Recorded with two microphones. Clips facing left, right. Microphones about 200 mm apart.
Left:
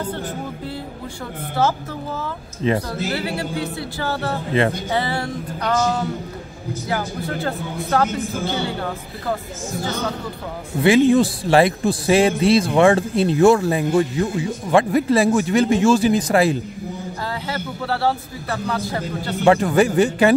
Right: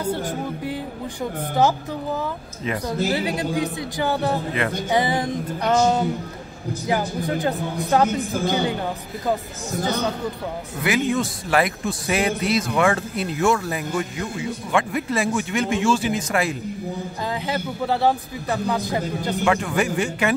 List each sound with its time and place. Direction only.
0.1 s a man's voice: 10° right (ahead or behind)
3.1 s a man's voice: 15° right (ahead or behind)
4.8 s music: 15° right (ahead or behind)
6.9 s a man's voice: 15° right (ahead or behind)
10.8 s a man's voice: 30° left (ahead or behind)
17.5 s a man's voice: 15° right (ahead or behind)
19.4 s speech: 35° left (ahead or behind)